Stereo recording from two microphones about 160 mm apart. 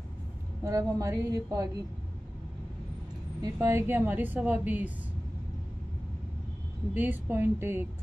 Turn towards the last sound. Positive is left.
turn(degrees=-15)  # may be behind; listen again after turning